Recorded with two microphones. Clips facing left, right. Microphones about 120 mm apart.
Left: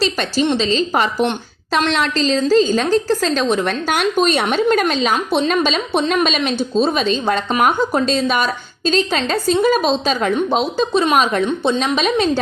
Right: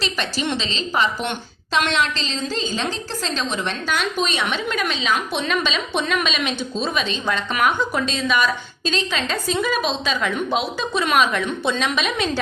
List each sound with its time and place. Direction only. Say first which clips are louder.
0.0 s a woman's voice: left 7 dB; 35° left (ahead or behind)
5.1 s a woman's voice: left 6 dB; 30° left (ahead or behind)